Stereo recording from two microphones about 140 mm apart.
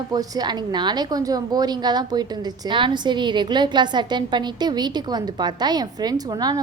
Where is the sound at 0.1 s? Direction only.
30° right (ahead or behind).